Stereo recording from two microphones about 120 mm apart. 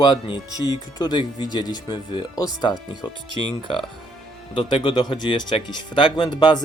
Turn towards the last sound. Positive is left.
turn(degrees=40)  # may be behind; listen again after turning